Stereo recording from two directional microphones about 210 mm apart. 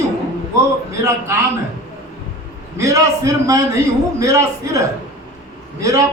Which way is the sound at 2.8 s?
15° right (ahead or behind).